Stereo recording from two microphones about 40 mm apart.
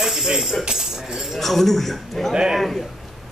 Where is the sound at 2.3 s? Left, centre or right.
Centre.